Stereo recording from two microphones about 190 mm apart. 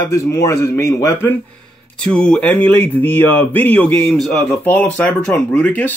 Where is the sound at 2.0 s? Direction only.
5° left (ahead or behind).